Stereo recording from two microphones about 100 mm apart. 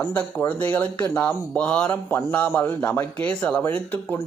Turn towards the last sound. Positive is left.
turn(degrees=15)  # may be behind; listen again after turning